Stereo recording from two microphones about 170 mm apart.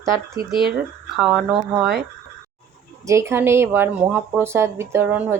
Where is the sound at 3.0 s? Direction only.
15° right (ahead or behind).